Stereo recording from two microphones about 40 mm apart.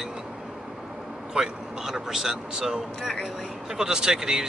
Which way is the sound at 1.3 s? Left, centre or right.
Centre.